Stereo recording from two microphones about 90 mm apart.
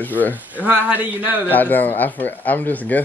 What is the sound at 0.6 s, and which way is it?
Speech, 15° right (ahead or behind).